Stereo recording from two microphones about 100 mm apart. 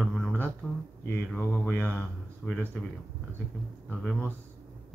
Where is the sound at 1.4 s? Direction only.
15° left (ahead or behind).